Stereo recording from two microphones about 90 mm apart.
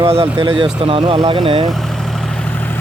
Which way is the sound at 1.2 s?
75° right (ahead or behind).